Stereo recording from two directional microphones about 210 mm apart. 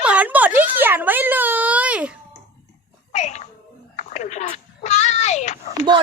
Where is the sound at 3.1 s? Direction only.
35° left (ahead or behind).